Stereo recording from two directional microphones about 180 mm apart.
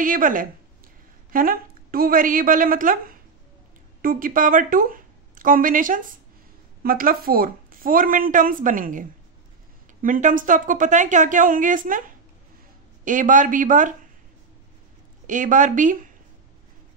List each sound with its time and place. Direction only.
0.0 s a woman's voice: 50° right (ahead or behind)
10.0 s a woman's voice: 50° right (ahead or behind)
13.0 s a woman's voice: 45° right (ahead or behind)
15.2 s a woman's voice: 45° right (ahead or behind)